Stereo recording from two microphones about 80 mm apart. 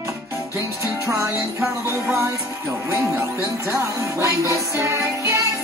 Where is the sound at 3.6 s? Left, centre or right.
Right.